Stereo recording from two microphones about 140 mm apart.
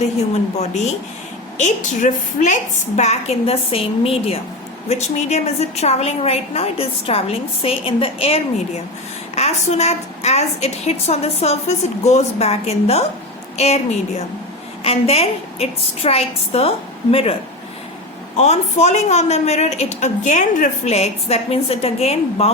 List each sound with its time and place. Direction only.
1.5 s a woman's voice: 60° left (ahead or behind)
14.8 s a woman's voice: 45° left (ahead or behind)
18.3 s a woman's voice: 50° left (ahead or behind)